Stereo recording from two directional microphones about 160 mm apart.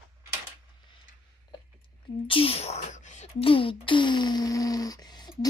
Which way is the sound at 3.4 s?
35° left (ahead or behind).